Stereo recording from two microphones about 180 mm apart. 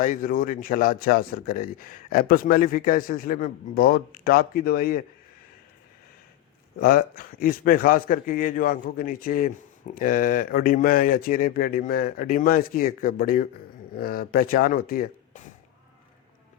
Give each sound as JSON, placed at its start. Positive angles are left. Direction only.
{"t": 0.0, "sound": "a man's voice", "side_deg": 50}
{"t": 6.7, "sound": "a man's voice", "side_deg": 55}